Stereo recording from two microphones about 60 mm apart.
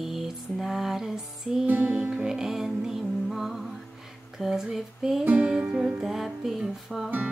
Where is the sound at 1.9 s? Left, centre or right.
Centre.